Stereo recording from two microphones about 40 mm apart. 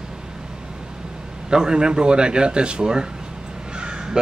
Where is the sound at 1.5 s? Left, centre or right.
Centre.